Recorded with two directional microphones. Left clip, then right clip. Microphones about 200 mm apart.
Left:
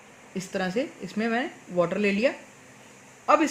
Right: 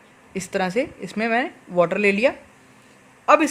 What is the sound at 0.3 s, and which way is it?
A woman's voice, 60° right (ahead or behind).